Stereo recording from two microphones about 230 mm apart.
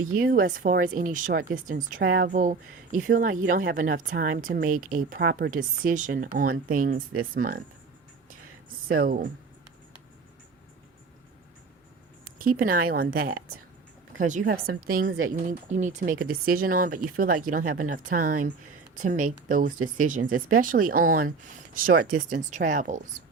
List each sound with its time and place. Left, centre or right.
0.0 s speech: right
8.9 s speech: right
12.6 s speech: right